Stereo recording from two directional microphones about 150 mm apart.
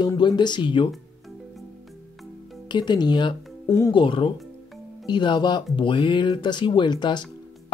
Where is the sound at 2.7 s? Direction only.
30° left (ahead or behind).